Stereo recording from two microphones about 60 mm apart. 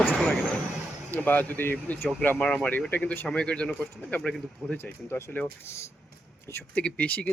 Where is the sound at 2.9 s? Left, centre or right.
Left.